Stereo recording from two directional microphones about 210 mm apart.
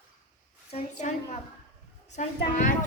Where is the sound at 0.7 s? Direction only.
35° left (ahead or behind).